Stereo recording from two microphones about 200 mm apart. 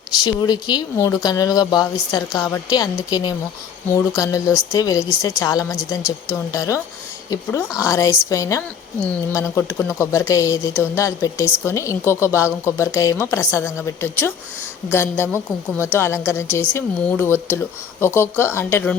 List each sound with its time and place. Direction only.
0.1 s a woman's voice: 20° left (ahead or behind)